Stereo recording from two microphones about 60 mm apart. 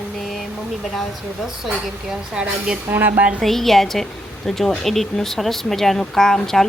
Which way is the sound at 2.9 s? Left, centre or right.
Right.